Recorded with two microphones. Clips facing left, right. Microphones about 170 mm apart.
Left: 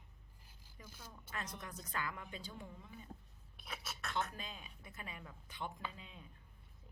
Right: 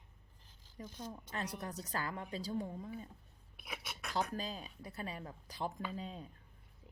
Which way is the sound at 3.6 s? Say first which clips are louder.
Right 1 dB; 10° right (ahead or behind).